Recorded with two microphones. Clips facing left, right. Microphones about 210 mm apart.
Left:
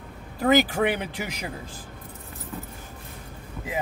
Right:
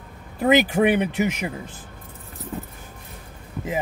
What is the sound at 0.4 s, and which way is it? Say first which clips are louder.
Speech: right 3 dB; 20° right (ahead or behind).